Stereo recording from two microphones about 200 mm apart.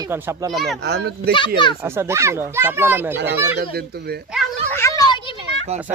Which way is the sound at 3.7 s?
55° right (ahead or behind).